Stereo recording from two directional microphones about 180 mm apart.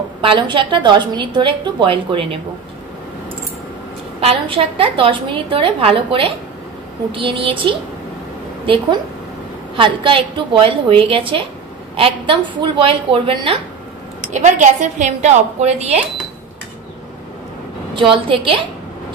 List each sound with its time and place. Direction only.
0.2 s a woman's voice: 25° right (ahead or behind)
4.2 s a woman's voice: 35° right (ahead or behind)
14.3 s a woman's voice: 40° right (ahead or behind)
17.9 s a woman's voice: 30° right (ahead or behind)